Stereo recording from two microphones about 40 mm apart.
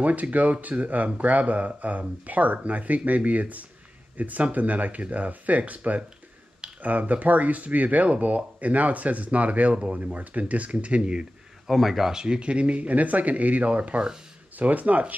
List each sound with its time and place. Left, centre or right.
0.0 s speech: right
11.6 s speech: centre
12.1 s speech: centre; by 15.1 s right